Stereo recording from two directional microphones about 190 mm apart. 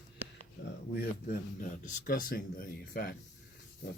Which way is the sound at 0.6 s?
65° left (ahead or behind).